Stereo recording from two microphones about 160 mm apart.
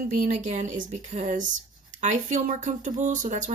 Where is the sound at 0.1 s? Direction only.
50° right (ahead or behind).